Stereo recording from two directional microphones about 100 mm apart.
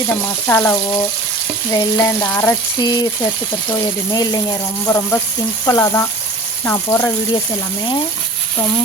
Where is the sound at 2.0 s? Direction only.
25° left (ahead or behind).